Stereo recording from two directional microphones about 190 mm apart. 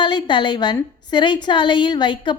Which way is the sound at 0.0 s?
25° left (ahead or behind).